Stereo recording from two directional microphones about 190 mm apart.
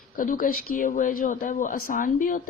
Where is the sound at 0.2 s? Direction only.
45° left (ahead or behind).